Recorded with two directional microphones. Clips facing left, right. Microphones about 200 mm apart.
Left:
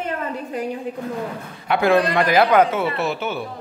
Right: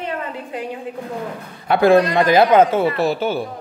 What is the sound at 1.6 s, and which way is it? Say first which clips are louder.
Speech: right 4 dB; 35° right (ahead or behind).